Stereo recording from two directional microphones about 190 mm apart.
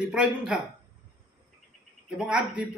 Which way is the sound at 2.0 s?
5° right (ahead or behind).